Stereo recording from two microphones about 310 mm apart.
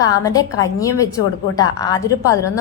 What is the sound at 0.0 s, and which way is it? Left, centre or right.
A woman's voice, centre.